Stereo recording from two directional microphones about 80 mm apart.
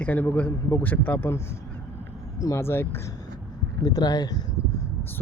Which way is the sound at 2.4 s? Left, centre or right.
Left.